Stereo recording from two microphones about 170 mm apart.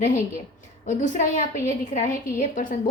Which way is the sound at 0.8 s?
50° left (ahead or behind).